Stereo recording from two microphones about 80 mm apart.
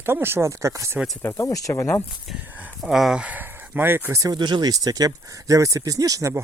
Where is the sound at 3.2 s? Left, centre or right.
Right.